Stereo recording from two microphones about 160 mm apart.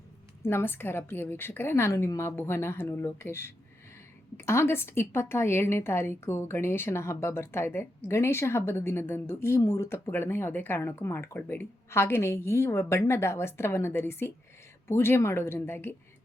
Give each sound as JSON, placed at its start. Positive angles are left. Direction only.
{"t": 0.4, "sound": "a woman's voice", "side_deg": 15}